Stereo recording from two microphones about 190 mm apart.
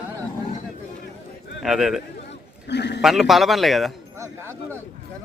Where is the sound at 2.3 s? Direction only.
65° left (ahead or behind).